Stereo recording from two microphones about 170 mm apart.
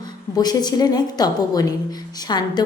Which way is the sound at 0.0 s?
25° left (ahead or behind).